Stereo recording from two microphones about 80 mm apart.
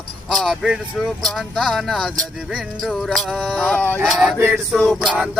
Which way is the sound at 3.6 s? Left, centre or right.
Left.